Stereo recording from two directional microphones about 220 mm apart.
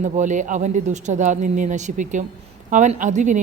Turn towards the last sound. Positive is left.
turn(degrees=-35)  # may be behind; listen again after turning